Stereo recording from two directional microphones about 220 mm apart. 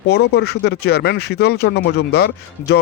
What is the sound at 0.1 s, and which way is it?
Speech, 45° left (ahead or behind).